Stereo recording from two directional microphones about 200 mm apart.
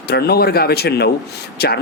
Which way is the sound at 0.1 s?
50° left (ahead or behind).